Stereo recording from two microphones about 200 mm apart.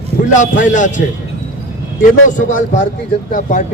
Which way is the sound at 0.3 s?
40° left (ahead or behind).